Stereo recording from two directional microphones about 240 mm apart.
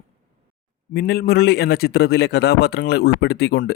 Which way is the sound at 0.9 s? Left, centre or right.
Left.